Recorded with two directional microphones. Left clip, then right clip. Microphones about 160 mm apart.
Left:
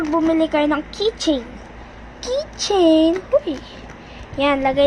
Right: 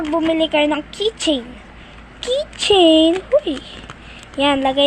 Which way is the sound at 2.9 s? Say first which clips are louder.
Left 1 dB; 40° right (ahead or behind).